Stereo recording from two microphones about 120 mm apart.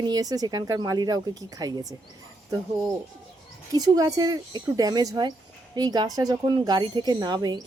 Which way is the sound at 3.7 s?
30° right (ahead or behind).